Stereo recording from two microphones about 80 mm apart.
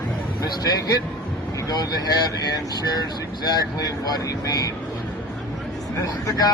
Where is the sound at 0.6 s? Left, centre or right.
Left.